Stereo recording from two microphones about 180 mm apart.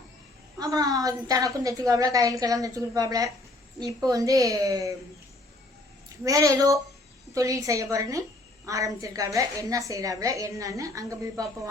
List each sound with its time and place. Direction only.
0.6 s a woman's voice: 20° right (ahead or behind)
6.2 s a woman's voice: 20° right (ahead or behind)